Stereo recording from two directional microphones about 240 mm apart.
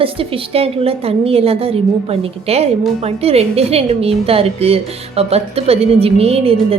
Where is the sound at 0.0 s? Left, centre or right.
Right.